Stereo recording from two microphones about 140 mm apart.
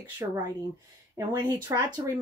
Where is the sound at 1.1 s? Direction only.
30° right (ahead or behind).